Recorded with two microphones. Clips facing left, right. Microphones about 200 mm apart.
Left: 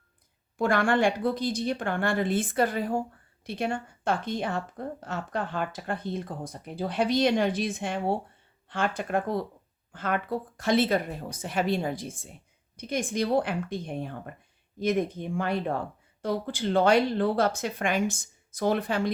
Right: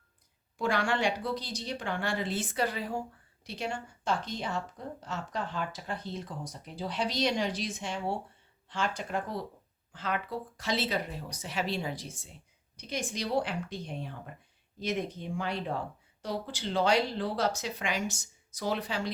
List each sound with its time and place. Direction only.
0.6 s speech: 55° left (ahead or behind)